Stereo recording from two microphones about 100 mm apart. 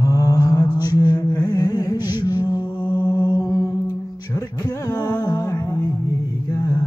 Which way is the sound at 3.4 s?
35° left (ahead or behind).